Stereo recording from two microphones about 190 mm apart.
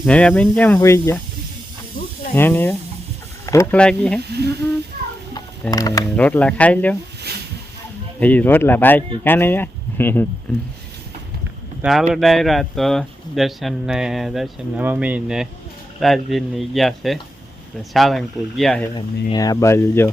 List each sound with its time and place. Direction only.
0.0 s speech: 5° left (ahead or behind)
2.3 s speech: 10° left (ahead or behind)
4.2 s humming: 60° right (ahead or behind)
5.7 s speech: 20° left (ahead or behind)
6.1 s speech: 5° left (ahead or behind)
8.2 s speech: 10° left (ahead or behind)
11.8 s speech: centre (ahead or behind)
18.9 s speech: 20° left (ahead or behind)